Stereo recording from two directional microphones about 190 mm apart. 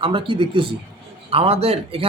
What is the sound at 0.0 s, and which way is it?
Speech, 25° right (ahead or behind).